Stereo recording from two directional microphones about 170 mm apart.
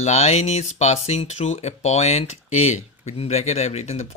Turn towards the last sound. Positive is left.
turn(degrees=40)  # may be behind; listen again after turning